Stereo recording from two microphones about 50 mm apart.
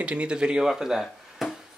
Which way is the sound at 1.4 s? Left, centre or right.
Centre.